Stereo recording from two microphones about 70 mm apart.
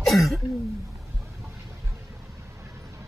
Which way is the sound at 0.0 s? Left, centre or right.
Centre.